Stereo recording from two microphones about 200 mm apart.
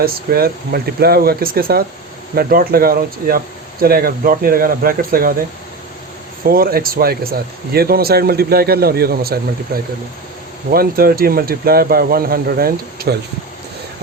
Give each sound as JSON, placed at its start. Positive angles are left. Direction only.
{"t": 0.0, "sound": "speech", "side_deg": -50}
{"t": 6.4, "sound": "speech", "side_deg": -50}